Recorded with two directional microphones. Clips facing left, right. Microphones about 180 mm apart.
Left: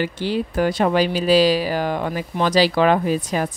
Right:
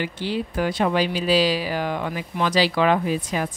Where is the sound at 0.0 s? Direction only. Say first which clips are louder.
Left 4 dB; 40° left (ahead or behind).